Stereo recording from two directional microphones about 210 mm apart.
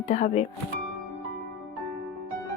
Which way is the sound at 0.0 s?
30° left (ahead or behind).